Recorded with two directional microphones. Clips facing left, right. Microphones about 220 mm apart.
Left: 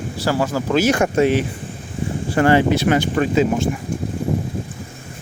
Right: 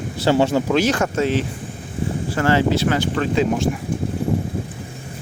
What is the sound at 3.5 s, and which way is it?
Speech, centre (ahead or behind).